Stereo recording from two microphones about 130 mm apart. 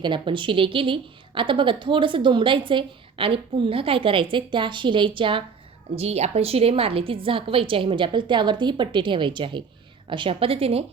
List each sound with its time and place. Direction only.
0.0 s a woman's voice: 40° right (ahead or behind)
6.0 s a woman's voice: 55° right (ahead or behind)